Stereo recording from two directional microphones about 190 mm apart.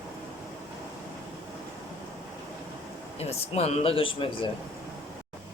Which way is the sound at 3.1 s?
30° left (ahead or behind).